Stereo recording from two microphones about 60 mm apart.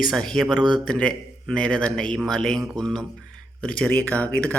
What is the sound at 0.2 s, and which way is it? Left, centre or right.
A man's voice, centre.